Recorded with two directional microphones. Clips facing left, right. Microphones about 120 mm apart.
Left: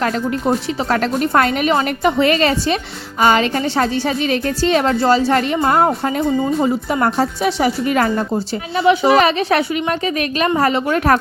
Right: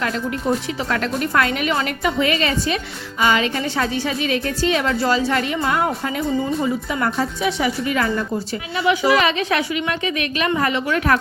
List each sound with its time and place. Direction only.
0.0 s speech: 40° left (ahead or behind)